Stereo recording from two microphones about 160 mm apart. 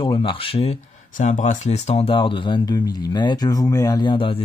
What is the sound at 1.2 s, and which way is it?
Speech, 50° left (ahead or behind).